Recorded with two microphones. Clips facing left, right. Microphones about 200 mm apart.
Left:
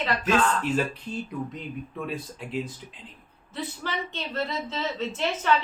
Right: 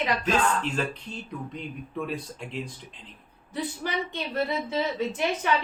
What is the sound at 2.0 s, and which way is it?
Speech, centre (ahead or behind).